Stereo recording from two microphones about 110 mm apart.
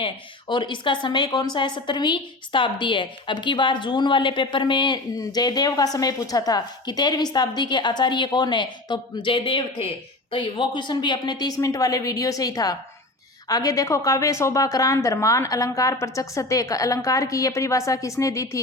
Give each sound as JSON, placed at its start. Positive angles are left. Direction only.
{"t": 0.0, "sound": "a woman's voice", "side_deg": 45}